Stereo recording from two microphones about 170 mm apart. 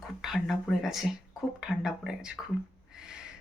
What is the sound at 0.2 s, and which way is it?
Speech, centre (ahead or behind).